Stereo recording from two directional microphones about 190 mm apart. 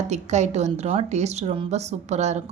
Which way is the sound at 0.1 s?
35° right (ahead or behind).